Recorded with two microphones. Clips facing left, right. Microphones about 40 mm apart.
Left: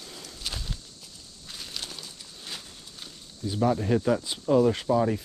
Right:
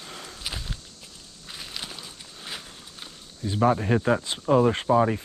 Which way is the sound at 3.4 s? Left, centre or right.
Right.